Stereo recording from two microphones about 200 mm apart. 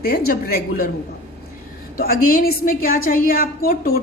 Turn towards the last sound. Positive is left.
turn(degrees=45)  # may be behind; listen again after turning